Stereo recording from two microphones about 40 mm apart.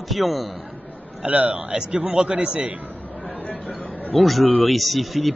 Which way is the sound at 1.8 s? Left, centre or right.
Centre.